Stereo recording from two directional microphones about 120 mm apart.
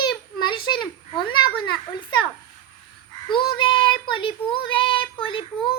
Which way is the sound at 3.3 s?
45° left (ahead or behind).